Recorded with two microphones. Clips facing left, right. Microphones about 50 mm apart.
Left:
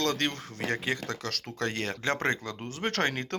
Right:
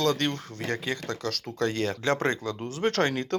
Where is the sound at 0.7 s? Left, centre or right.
Centre.